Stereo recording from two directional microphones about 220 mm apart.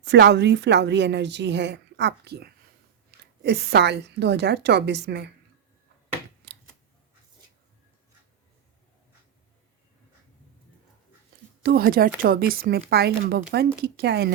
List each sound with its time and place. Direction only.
0.0 s a woman's voice: 50° right (ahead or behind)
11.6 s a woman's voice: 40° right (ahead or behind)